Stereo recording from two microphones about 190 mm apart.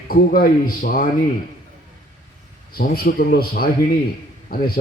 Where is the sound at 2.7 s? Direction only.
50° left (ahead or behind).